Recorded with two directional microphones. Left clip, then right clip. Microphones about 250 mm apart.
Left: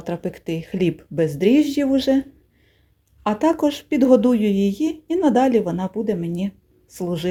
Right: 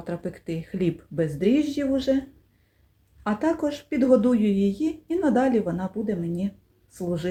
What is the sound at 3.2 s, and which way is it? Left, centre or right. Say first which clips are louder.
Speech: left 6 dB; left.